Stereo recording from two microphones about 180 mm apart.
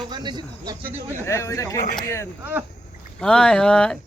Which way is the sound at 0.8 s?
10° right (ahead or behind).